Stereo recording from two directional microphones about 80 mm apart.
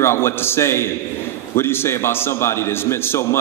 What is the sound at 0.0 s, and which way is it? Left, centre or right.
A man's voice, left.